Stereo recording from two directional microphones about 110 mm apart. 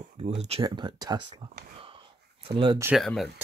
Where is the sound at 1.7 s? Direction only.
55° right (ahead or behind).